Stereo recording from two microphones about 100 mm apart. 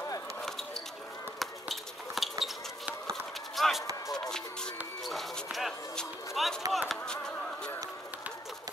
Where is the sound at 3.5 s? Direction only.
Centre (ahead or behind).